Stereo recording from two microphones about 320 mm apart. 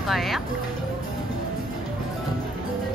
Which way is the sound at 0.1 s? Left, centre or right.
Centre.